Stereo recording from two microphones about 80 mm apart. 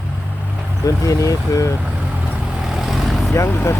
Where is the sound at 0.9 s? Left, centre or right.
Left.